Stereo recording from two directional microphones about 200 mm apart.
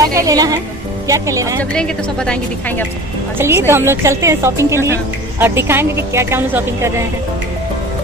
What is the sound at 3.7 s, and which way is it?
A woman's voice, 10° right (ahead or behind).